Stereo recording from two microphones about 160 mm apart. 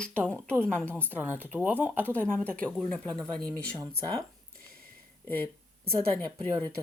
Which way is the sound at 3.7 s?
20° right (ahead or behind).